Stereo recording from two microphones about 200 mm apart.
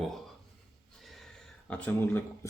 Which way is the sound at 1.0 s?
Centre (ahead or behind).